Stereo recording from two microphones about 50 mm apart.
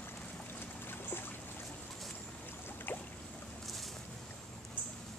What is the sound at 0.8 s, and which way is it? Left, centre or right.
Boat, left.